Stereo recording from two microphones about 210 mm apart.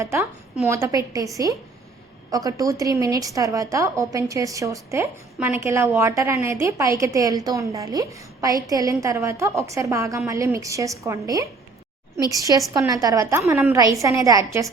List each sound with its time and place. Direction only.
0.0 s a woman's voice: 15° right (ahead or behind)
2.3 s a woman's voice: 15° right (ahead or behind)
12.7 s a woman's voice: 15° right (ahead or behind)